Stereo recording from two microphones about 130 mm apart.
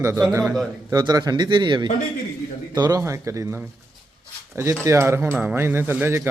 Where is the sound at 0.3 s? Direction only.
20° right (ahead or behind).